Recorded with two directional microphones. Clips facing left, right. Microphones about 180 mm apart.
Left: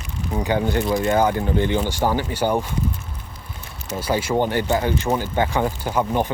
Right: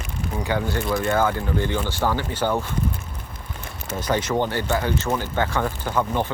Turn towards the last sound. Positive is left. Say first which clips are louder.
# left 2 dB
turn(degrees=15)  # may be behind; listen again after turning